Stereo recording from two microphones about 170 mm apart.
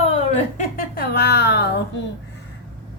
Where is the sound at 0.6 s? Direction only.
60° left (ahead or behind); by 1.7 s 75° left (ahead or behind).